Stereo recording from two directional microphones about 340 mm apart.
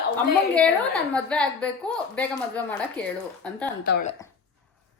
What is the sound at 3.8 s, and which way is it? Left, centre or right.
Speech, left.